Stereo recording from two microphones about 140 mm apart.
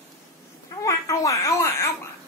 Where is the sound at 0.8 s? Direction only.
20° left (ahead or behind).